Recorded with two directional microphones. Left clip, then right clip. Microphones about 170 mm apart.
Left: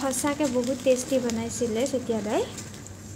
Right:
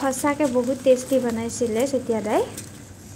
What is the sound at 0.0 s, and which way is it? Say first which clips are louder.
A woman's voice: right 4 dB; 5° right (ahead or behind).